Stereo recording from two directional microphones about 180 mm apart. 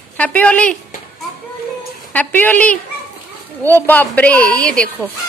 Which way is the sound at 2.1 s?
10° left (ahead or behind).